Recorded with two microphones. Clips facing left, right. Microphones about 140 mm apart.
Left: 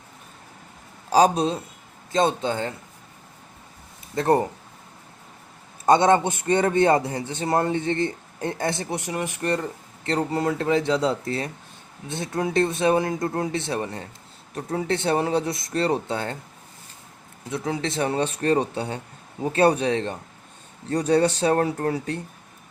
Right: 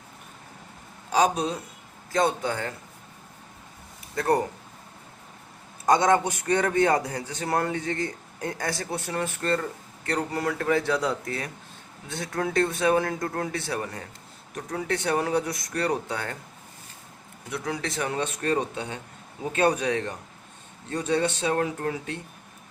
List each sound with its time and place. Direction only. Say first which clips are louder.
1.1 s a man's voice: left 5 dB; 30° left (ahead or behind)
4.1 s a man's voice: left 3 dB; 25° left (ahead or behind)
5.8 s a man's voice: left 3 dB; 25° left (ahead or behind)
17.5 s speech: left 4 dB; 25° left (ahead or behind)